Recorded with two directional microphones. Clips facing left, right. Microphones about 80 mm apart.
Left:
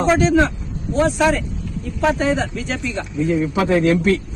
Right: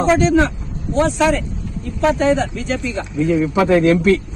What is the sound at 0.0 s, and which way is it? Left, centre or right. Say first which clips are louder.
Speech: right 1 dB; centre.